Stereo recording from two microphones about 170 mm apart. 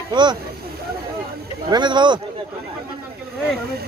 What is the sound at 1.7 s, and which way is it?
Speech, 25° right (ahead or behind).